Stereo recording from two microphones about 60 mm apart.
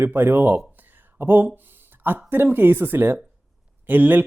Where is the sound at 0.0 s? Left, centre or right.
Right.